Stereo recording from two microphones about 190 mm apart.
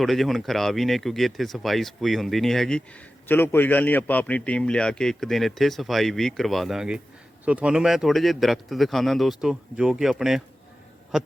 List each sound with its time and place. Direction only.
0.0 s a man's voice: centre (ahead or behind)